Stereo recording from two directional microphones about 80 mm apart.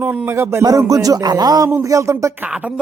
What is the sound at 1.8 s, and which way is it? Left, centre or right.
Speech, right.